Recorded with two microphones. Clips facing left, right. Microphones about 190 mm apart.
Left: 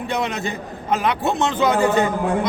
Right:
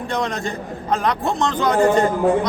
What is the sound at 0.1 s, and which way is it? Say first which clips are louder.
A man's voice: right 1 dB; 5° left (ahead or behind).